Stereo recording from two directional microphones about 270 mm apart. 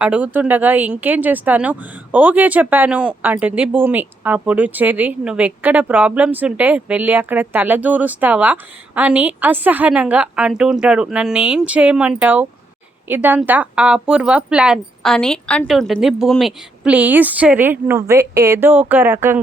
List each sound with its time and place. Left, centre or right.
0.0 s speech: centre